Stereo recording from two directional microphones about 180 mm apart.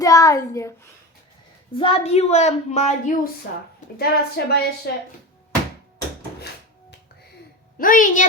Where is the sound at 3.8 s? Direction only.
45° left (ahead or behind).